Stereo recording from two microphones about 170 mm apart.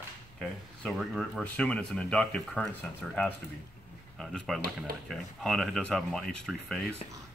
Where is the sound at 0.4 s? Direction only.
Centre (ahead or behind).